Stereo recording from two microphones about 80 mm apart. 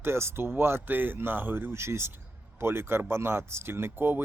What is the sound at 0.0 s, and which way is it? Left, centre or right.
Speech, right.